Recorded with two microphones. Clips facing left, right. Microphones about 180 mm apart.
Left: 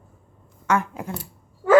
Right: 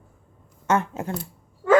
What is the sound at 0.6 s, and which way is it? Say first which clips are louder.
Speech: right 1 dB; 25° right (ahead or behind).